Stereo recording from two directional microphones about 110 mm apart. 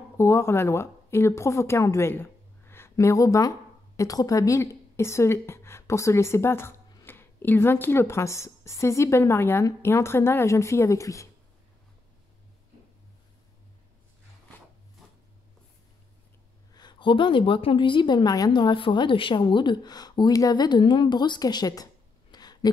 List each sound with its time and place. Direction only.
0.2 s speech: 25° left (ahead or behind)
16.7 s a woman's voice: 45° left (ahead or behind)
22.3 s a sound: 40° left (ahead or behind)